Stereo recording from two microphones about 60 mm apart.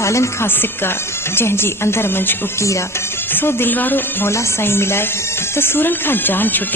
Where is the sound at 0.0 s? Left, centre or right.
Left.